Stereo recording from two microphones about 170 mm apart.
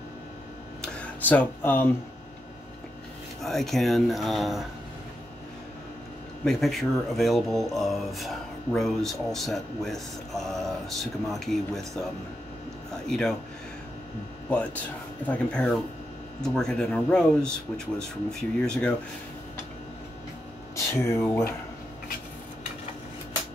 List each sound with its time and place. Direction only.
0.9 s speech: 10° left (ahead or behind)
3.4 s speech: centre (ahead or behind)
6.4 s speech: centre (ahead or behind)
14.5 s speech: 5° left (ahead or behind)
20.7 s speech: 15° left (ahead or behind)